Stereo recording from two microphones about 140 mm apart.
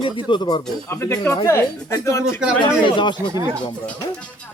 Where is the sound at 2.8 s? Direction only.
35° left (ahead or behind).